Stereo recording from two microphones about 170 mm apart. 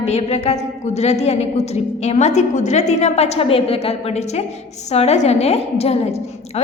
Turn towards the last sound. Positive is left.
turn(degrees=40)  # may be behind; listen again after turning